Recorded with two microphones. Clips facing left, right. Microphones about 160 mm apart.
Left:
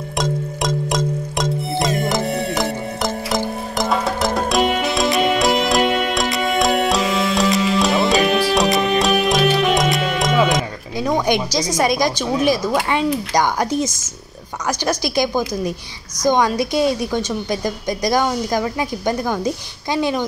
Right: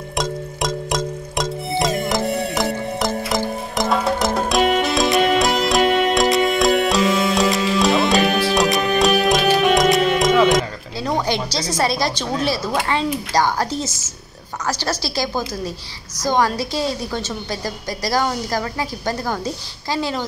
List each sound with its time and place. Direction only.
0.2 s music: centre (ahead or behind)
11.5 s a woman's voice: 15° left (ahead or behind)